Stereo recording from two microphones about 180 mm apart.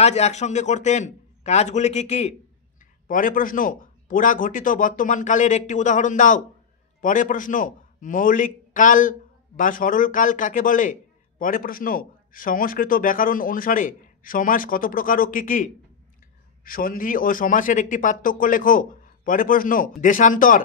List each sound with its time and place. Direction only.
0.0 s a man's voice: 40° left (ahead or behind)